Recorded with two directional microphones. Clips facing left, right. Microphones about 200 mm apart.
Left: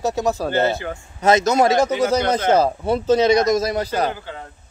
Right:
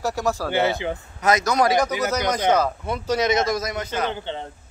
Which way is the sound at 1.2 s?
25° left (ahead or behind).